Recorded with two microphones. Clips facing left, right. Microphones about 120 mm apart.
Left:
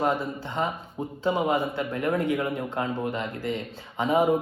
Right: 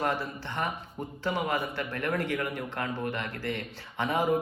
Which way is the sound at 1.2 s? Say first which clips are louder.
Left 6 dB; 20° left (ahead or behind).